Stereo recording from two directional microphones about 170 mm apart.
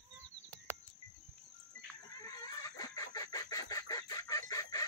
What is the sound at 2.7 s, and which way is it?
Chicken, 20° left (ahead or behind).